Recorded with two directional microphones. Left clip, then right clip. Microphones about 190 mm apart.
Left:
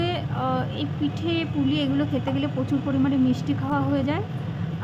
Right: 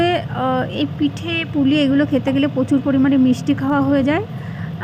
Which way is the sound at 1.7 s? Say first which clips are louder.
Right 9 dB; 20° right (ahead or behind).